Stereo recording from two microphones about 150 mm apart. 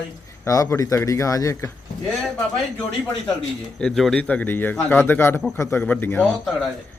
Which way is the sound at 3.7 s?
5° left (ahead or behind).